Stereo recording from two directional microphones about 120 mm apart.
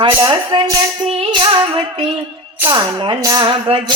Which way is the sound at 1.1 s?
50° right (ahead or behind).